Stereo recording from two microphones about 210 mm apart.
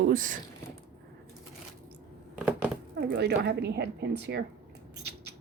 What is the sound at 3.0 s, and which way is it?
A woman's voice, 50° right (ahead or behind).